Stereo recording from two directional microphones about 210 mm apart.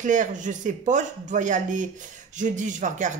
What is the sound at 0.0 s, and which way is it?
Speech, 35° right (ahead or behind).